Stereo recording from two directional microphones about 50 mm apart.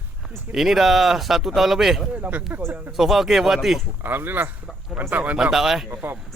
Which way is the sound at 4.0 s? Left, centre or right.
Right.